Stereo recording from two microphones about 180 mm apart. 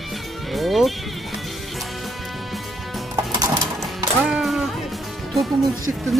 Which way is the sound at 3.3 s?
20° right (ahead or behind).